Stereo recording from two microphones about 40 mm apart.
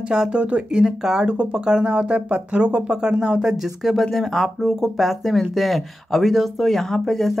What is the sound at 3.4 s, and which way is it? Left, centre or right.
Speech, centre.